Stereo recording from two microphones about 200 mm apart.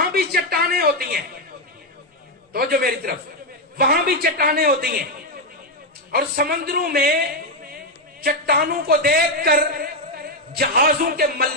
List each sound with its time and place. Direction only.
0.1 s a woman's voice: 50° right (ahead or behind)
2.5 s a man's voice: 50° right (ahead or behind)
6.1 s a man's voice: 50° right (ahead or behind)
8.2 s a man's voice: 50° right (ahead or behind)